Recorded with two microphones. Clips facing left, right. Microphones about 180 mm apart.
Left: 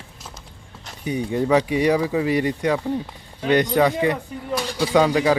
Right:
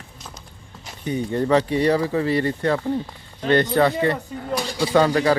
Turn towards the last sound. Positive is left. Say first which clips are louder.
# even
turn(degrees=10)  # may be behind; listen again after turning